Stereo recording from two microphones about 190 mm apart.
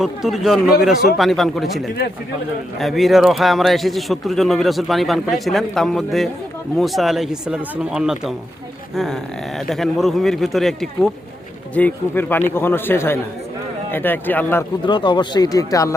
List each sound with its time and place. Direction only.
0.0 s a man's voice: centre (ahead or behind)
9.6 s a man's voice: centre (ahead or behind)
14.8 s speech: 25° left (ahead or behind)